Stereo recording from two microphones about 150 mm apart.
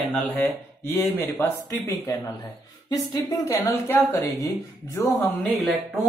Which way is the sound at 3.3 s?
20° left (ahead or behind).